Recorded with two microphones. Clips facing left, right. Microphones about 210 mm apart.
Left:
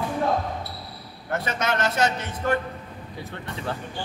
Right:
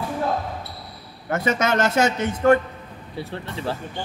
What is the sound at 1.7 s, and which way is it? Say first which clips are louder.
Speech: right 2 dB; 45° right (ahead or behind).